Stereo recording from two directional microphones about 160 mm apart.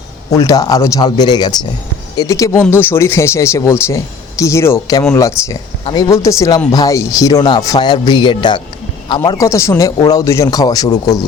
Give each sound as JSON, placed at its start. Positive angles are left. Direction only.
{"t": 0.3, "sound": "speech", "side_deg": 20}